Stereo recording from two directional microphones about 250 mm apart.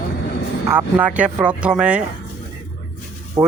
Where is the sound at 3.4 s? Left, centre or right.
Centre.